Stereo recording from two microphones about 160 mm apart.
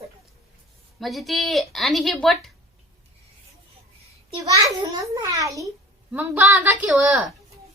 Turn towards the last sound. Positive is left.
turn(degrees=-5)  # may be behind; listen again after turning